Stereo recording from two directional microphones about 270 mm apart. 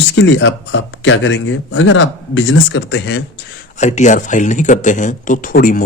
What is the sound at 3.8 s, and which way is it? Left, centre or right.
Speech, left.